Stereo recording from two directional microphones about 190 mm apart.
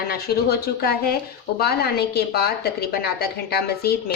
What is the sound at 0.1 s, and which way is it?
A woman's voice, 55° left (ahead or behind).